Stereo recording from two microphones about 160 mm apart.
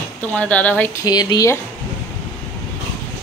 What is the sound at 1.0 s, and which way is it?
Speech, 25° left (ahead or behind).